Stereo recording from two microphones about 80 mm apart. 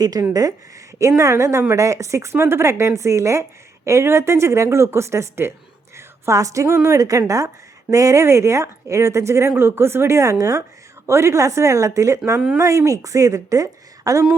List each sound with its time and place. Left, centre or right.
0.0 s a woman's voice: right
0.9 s a woman's voice: right
6.0 s a sound: right
6.8 s a woman's voice: right